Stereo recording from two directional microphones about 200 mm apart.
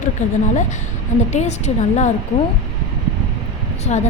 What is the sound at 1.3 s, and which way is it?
Speech, 35° left (ahead or behind).